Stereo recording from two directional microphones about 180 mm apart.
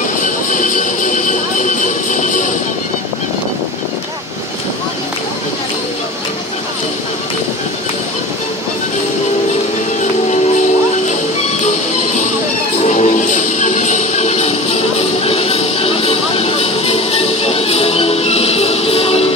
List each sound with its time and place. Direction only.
0.2 s music: 45° left (ahead or behind)
12.8 s music: 40° left (ahead or behind)